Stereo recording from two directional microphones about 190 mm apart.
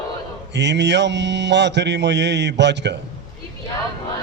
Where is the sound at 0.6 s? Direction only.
65° right (ahead or behind).